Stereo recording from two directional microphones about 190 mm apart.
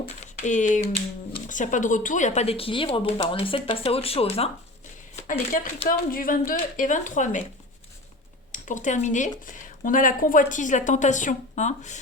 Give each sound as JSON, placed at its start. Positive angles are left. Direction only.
{"t": 0.4, "sound": "speech", "side_deg": 40}
{"t": 5.3, "sound": "a woman's voice", "side_deg": 45}
{"t": 8.5, "sound": "a woman's voice", "side_deg": 40}